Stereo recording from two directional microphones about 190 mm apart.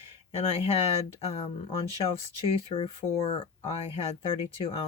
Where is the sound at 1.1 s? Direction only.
30° left (ahead or behind).